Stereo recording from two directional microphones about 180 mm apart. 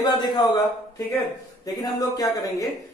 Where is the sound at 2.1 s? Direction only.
20° left (ahead or behind).